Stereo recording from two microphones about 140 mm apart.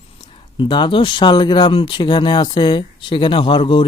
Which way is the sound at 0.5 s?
35° left (ahead or behind).